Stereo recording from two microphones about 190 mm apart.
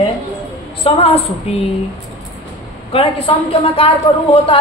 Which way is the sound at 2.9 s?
30° left (ahead or behind).